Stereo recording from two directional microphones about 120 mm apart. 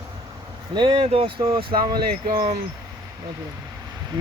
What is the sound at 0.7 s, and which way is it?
Speech, 40° right (ahead or behind).